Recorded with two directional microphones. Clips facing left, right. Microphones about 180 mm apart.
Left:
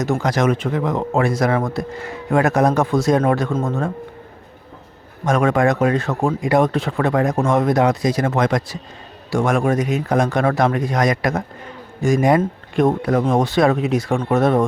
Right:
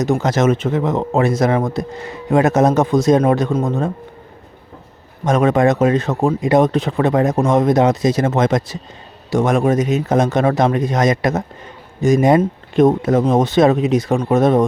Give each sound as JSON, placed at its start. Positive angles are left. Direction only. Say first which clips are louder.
{"t": 0.0, "sound": "speech", "louder": "right 3 dB", "side_deg": -20}
{"t": 5.2, "sound": "speech", "louder": "right 3 dB", "side_deg": -20}